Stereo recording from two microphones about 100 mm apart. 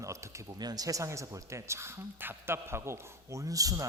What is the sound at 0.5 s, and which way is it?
Speech, 40° right (ahead or behind).